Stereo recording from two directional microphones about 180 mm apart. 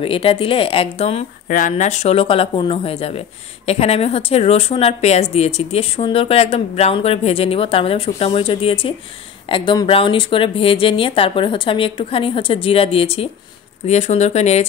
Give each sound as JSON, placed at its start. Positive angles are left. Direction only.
{"t": 0.0, "sound": "speech", "side_deg": 30}
{"t": 1.5, "sound": "a woman's voice", "side_deg": 45}